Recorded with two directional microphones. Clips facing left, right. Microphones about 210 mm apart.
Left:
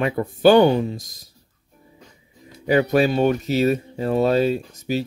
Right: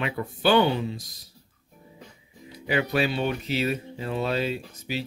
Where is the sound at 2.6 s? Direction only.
45° left (ahead or behind).